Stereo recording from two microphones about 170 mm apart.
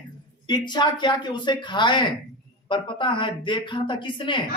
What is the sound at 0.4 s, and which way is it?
Speech, 25° left (ahead or behind).